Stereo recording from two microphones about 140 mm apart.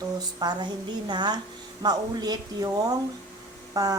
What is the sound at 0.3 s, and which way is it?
A woman's voice, 30° right (ahead or behind).